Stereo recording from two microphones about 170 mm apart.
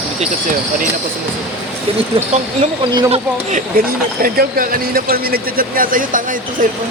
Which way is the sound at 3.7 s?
55° right (ahead or behind).